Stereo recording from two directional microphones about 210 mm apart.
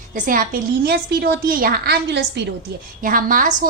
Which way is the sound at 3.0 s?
40° right (ahead or behind).